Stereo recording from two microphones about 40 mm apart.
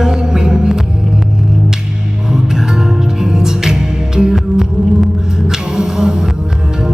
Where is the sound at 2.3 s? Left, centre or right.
Centre.